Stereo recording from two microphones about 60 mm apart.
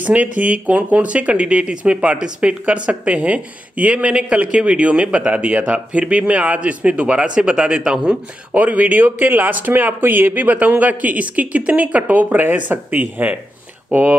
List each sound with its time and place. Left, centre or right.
0.0 s speech: right